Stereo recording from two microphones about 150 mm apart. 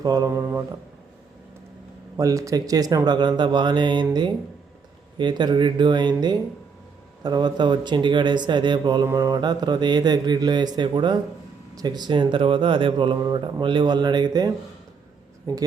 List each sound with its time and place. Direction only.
0.0 s speech: 25° right (ahead or behind)
2.1 s speech: 20° right (ahead or behind)